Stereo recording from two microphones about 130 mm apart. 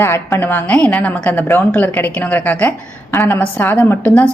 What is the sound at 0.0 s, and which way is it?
A woman's voice, 15° left (ahead or behind).